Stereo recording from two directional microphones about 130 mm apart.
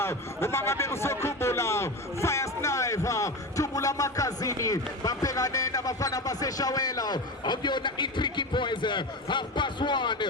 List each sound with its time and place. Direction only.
0.0 s a man's voice: 20° left (ahead or behind); by 10.2 s 35° left (ahead or behind)